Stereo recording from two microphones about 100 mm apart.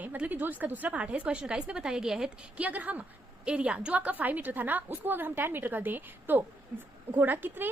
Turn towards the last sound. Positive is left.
turn(degrees=-20)  # may be behind; listen again after turning